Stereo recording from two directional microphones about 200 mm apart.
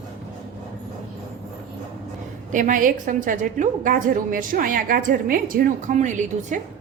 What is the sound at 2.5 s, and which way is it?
A woman's voice, 40° right (ahead or behind).